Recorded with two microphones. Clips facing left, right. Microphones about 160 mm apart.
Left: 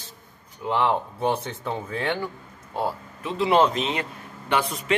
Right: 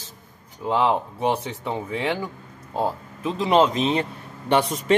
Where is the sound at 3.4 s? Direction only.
20° right (ahead or behind).